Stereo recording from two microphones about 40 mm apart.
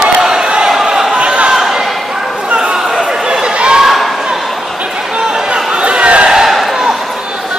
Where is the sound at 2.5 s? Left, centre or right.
Right.